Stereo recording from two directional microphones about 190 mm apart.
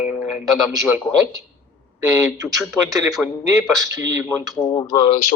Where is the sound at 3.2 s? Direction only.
Centre (ahead or behind).